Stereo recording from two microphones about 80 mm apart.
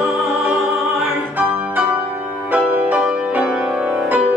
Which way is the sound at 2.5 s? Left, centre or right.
Centre.